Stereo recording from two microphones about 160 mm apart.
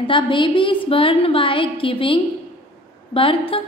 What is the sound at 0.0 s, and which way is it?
A woman's voice, 30° left (ahead or behind).